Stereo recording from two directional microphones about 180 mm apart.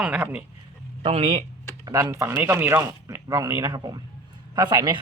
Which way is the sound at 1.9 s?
15° right (ahead or behind).